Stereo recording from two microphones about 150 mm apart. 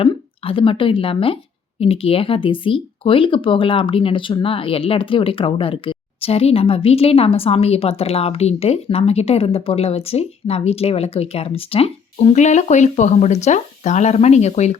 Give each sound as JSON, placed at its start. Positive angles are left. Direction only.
{"t": 0.0, "sound": "speech", "side_deg": 35}